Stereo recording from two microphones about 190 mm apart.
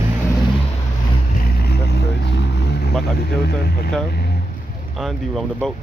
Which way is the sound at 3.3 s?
55° left (ahead or behind).